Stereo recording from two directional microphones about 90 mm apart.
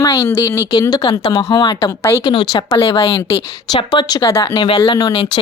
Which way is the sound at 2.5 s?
60° left (ahead or behind).